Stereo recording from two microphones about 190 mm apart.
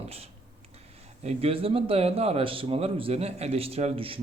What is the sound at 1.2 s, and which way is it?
A man's voice, 35° right (ahead or behind).